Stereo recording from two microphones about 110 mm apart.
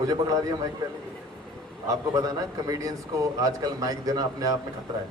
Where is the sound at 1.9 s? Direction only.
35° right (ahead or behind).